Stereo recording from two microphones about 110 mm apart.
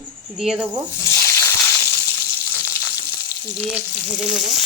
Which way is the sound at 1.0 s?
30° left (ahead or behind).